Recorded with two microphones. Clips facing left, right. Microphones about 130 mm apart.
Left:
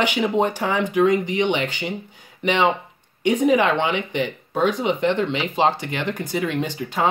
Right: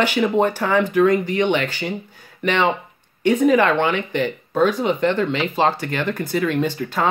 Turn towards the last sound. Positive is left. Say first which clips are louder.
# right 3 dB
turn(degrees=15)  # may be behind; listen again after turning